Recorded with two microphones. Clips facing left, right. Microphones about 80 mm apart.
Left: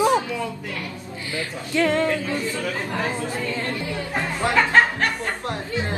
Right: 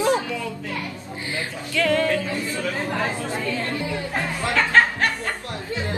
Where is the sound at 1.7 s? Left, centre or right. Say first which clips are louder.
Left 1 dB; left.